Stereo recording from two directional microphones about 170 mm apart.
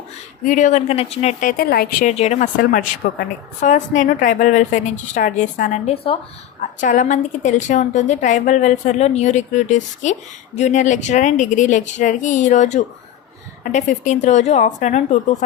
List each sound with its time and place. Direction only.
0.4 s a woman's voice: 45° left (ahead or behind)
2.0 s a woman's voice: 40° left (ahead or behind)
2.7 s a woman's voice: 50° left (ahead or behind); by 6.1 s 35° left (ahead or behind)
6.7 s a woman's voice: 50° left (ahead or behind)